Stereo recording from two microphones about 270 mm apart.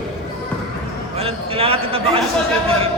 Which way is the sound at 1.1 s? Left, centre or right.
Right.